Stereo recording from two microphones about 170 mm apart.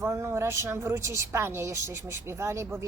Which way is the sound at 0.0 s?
15° right (ahead or behind).